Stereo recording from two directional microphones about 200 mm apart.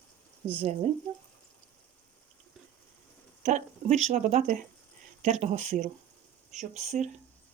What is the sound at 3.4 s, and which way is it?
Speech, 35° right (ahead or behind).